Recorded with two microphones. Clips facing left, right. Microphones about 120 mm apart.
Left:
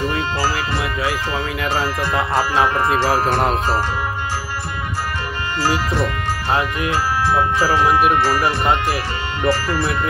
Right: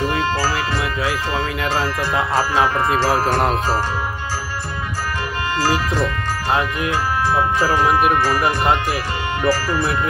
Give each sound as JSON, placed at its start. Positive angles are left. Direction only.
{"t": 0.7, "sound": "speech", "side_deg": 0}
{"t": 6.5, "sound": "speech", "side_deg": 0}
{"t": 9.5, "sound": "speech", "side_deg": 60}